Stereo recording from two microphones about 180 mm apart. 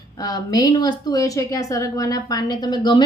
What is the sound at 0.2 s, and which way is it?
A woman's voice, 20° left (ahead or behind).